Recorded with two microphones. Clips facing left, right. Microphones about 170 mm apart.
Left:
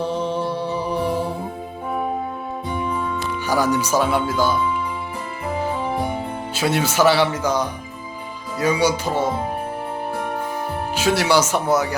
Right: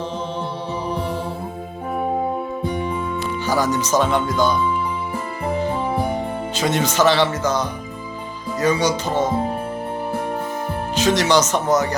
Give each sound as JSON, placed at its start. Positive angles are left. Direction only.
{"t": 0.0, "sound": "mantra", "side_deg": 10}
{"t": 3.4, "sound": "speech", "side_deg": 10}
{"t": 6.6, "sound": "speech", "side_deg": 10}
{"t": 10.9, "sound": "speech", "side_deg": 10}